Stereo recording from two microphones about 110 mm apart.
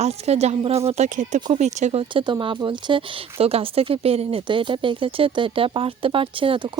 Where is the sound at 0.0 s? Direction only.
75° right (ahead or behind).